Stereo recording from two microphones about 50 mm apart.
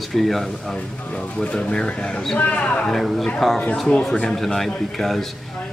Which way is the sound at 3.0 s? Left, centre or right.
Centre.